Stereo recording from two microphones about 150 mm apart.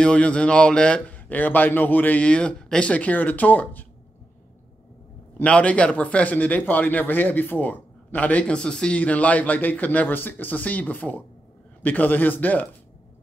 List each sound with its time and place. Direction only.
0.0 s a man's voice: 5° left (ahead or behind)
5.4 s a man's voice: 10° left (ahead or behind)